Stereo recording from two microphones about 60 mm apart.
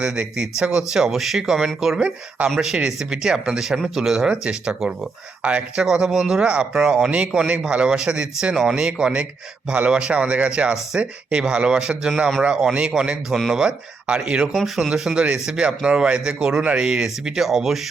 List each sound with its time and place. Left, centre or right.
0.0 s a man's voice: centre
2.0 s a man's voice: centre
14.5 s a man's voice: centre